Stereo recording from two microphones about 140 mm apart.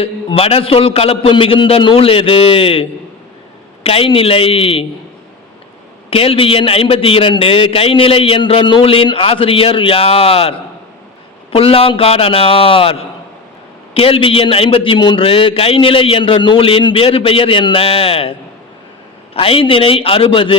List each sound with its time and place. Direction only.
0.0 s a man's voice: 40° left (ahead or behind)
3.8 s a man's voice: 40° left (ahead or behind)
6.1 s a man's voice: 45° left (ahead or behind)
11.5 s a man's voice: 45° left (ahead or behind)